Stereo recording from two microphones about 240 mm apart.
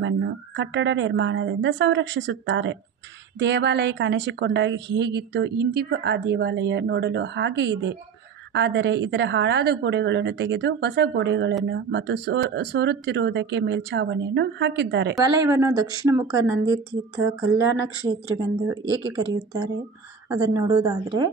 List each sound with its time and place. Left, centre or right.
0.0 s speech: right
15.1 s speech: centre
18.9 s speech: centre